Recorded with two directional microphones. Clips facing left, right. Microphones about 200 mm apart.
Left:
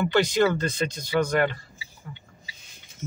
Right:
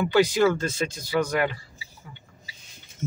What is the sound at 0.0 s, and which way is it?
A man's voice, 5° right (ahead or behind).